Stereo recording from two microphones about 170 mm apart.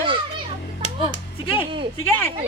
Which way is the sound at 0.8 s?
35° left (ahead or behind).